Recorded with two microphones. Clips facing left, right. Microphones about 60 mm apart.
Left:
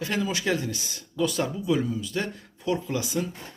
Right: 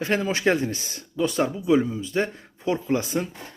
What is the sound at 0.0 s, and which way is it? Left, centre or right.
Speech, right.